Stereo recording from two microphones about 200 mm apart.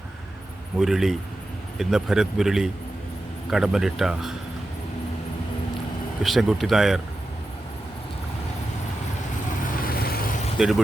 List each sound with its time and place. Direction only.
0.8 s speech: centre (ahead or behind)
6.2 s speech: centre (ahead or behind)
9.7 s vehicle: 45° left (ahead or behind)
10.6 s speech: centre (ahead or behind)